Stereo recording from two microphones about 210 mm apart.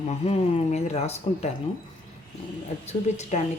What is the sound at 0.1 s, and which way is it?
Speech, 30° left (ahead or behind).